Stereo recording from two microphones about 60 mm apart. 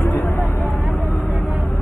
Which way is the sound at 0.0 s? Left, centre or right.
Left.